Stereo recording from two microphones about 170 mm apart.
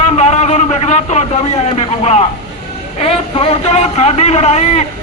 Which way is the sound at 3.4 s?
35° left (ahead or behind).